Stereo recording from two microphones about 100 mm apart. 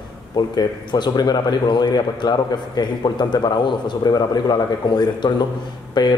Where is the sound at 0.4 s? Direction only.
45° left (ahead or behind).